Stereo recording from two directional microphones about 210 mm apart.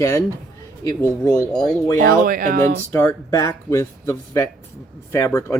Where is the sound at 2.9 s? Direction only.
15° left (ahead or behind).